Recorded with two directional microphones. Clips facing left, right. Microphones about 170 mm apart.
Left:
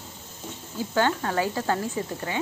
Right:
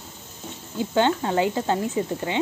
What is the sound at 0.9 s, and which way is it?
Speech, 20° right (ahead or behind).